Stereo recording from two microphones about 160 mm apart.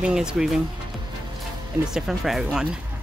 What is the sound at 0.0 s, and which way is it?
Speech, 5° right (ahead or behind).